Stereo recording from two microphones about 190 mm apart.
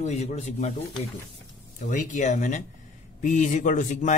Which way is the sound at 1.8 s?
40° left (ahead or behind).